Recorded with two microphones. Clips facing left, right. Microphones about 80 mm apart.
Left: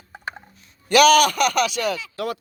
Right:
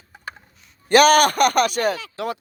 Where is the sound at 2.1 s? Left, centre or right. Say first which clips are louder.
Even; right.